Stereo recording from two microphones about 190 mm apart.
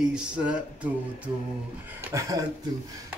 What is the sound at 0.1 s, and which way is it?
Speech, 5° right (ahead or behind).